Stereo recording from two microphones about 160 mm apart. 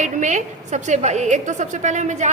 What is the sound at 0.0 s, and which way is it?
A woman's voice, 50° right (ahead or behind).